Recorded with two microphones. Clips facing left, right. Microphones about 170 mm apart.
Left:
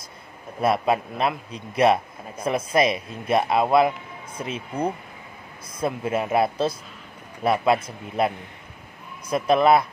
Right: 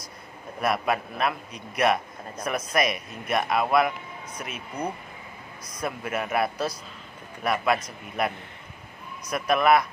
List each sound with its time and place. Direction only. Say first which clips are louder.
0.6 s a man's voice: left 4 dB; 25° left (ahead or behind)
9.3 s a man's voice: left 3 dB; 25° left (ahead or behind)